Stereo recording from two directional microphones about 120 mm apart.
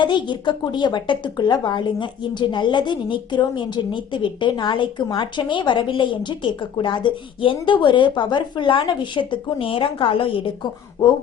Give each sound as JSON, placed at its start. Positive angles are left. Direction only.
{"t": 0.0, "sound": "a woman's voice", "side_deg": 40}